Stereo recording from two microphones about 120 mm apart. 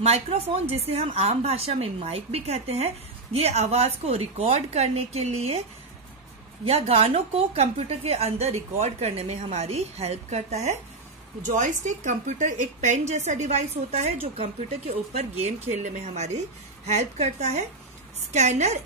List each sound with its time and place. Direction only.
0.0 s a woman's voice: 60° right (ahead or behind)
6.6 s a woman's voice: 55° right (ahead or behind)
11.5 s a woman's voice: 90° right; by 18.8 s 70° right (ahead or behind)